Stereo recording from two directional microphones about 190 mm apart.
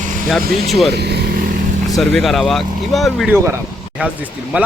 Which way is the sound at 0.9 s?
60° right (ahead or behind).